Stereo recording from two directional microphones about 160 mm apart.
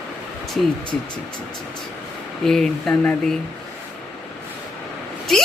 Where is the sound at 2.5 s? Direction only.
5° left (ahead or behind).